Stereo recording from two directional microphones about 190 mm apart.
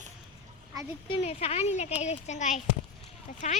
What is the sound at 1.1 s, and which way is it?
A child's voice, 35° left (ahead or behind).